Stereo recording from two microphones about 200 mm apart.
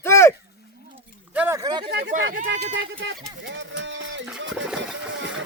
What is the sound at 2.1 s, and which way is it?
Speech, 45° right (ahead or behind).